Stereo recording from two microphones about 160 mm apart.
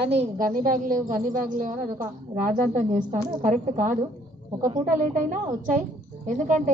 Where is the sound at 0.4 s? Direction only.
60° right (ahead or behind).